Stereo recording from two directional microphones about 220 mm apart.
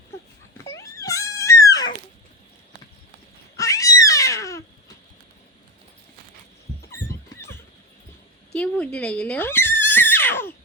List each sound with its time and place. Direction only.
0.6 s a sound: 15° left (ahead or behind)
3.6 s cat: 15° left (ahead or behind)
8.5 s neigh: 5° left (ahead or behind)